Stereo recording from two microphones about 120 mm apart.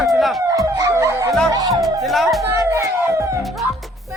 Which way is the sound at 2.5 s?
25° right (ahead or behind).